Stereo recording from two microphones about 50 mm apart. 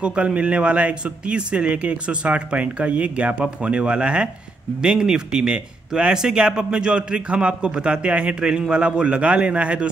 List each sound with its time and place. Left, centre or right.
0.0 s speech: right